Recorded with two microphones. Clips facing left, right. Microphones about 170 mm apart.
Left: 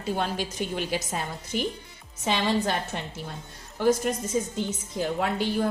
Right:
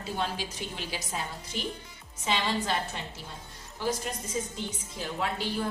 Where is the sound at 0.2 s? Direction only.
50° left (ahead or behind).